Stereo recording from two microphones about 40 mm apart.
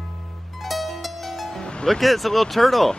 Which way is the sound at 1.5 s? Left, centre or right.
Left.